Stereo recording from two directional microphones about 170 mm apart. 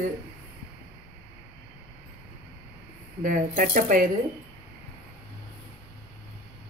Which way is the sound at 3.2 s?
50° right (ahead or behind).